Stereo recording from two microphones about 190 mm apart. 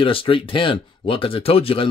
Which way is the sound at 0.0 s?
30° left (ahead or behind).